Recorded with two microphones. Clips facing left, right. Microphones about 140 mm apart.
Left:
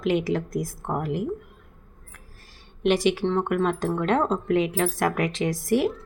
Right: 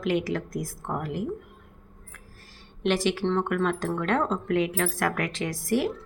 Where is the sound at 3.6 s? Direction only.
20° left (ahead or behind).